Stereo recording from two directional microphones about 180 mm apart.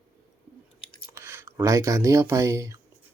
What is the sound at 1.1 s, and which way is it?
Speech, 15° right (ahead or behind).